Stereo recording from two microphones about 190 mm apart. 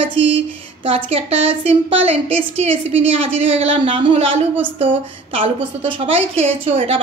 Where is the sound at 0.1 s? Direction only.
75° right (ahead or behind).